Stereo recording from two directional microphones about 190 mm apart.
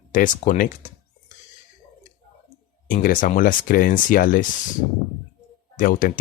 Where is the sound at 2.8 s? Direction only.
45° left (ahead or behind).